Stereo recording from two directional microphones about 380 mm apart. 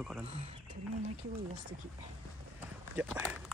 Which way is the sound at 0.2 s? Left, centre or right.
Centre.